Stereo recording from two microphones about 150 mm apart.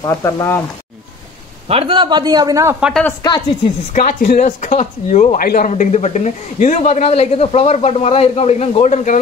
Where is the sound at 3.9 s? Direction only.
65° left (ahead or behind).